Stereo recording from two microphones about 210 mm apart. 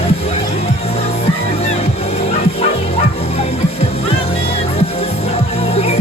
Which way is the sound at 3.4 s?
30° left (ahead or behind).